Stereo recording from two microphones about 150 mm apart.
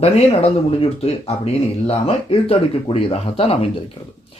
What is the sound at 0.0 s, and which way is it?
Speech, 40° left (ahead or behind).